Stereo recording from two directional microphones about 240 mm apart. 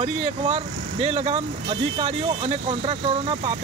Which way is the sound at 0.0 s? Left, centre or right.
Right.